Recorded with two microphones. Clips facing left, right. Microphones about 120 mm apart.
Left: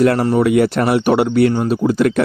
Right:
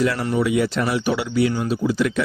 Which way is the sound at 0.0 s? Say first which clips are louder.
Left 7 dB; 55° left (ahead or behind).